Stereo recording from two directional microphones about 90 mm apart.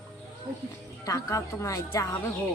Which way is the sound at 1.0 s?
40° left (ahead or behind).